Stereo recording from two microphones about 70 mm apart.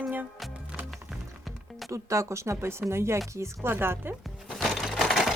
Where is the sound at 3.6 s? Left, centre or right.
Right.